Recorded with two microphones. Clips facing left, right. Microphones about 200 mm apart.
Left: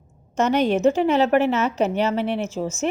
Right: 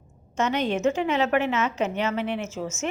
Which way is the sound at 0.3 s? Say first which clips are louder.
Left 5 dB; 40° left (ahead or behind).